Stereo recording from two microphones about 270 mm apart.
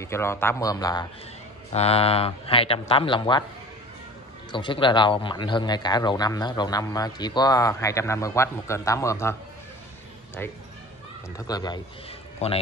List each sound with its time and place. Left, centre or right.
0.0 s speech: centre
4.5 s a man's voice: centre